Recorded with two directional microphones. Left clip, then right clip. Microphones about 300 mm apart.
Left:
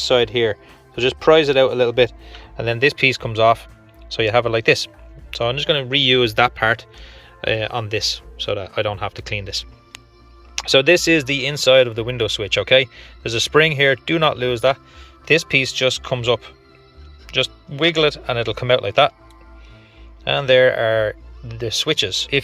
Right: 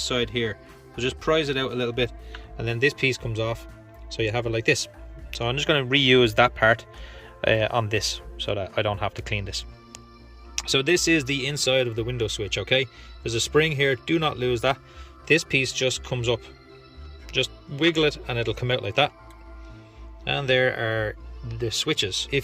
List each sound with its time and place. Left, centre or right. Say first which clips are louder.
0.0 s speech: left 9 dB; centre
20.2 s speech: left 8 dB; centre